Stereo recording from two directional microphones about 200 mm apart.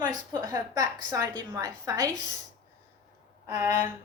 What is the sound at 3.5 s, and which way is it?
Speech, 15° right (ahead or behind).